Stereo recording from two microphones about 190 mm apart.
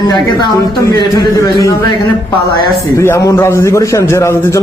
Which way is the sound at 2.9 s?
15° left (ahead or behind).